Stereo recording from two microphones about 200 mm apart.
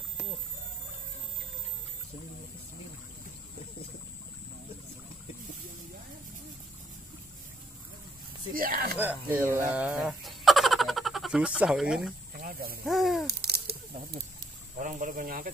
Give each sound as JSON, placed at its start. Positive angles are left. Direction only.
{"t": 8.5, "sound": "speech", "side_deg": -45}
{"t": 8.9, "sound": "speech", "side_deg": -10}
{"t": 12.4, "sound": "snake", "side_deg": -45}
{"t": 12.8, "sound": "owl", "side_deg": 0}
{"t": 13.3, "sound": "a sound", "side_deg": -50}
{"t": 14.8, "sound": "speech", "side_deg": -40}